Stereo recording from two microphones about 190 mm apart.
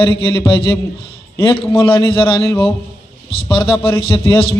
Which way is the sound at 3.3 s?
30° left (ahead or behind).